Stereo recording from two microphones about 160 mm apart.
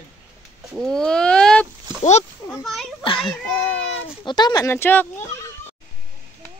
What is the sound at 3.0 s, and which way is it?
Speech, 30° left (ahead or behind).